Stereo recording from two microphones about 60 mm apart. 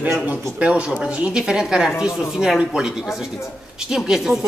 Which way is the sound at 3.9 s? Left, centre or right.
Centre.